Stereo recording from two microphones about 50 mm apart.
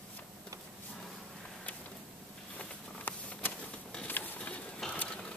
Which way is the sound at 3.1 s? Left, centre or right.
Left.